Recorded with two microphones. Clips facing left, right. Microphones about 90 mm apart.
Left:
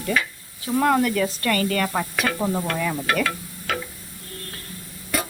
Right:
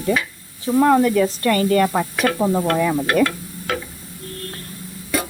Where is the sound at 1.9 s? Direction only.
15° right (ahead or behind).